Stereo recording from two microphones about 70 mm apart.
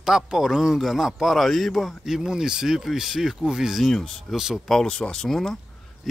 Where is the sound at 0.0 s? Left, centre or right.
Centre.